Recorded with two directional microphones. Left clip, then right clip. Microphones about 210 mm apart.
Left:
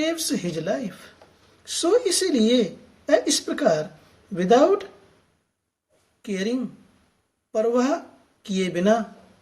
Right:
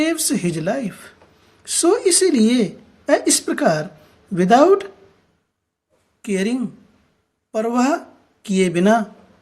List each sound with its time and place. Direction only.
0.0 s speech: 30° right (ahead or behind)
6.2 s speech: 35° right (ahead or behind)